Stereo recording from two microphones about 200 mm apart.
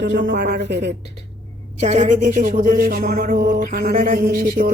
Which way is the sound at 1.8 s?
35° right (ahead or behind).